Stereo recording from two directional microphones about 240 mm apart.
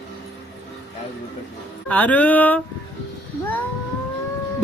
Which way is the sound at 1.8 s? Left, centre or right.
Centre.